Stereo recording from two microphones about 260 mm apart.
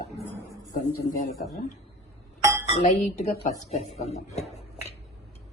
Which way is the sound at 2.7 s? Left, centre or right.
Left.